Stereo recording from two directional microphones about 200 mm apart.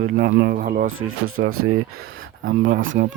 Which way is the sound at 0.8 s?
90° right.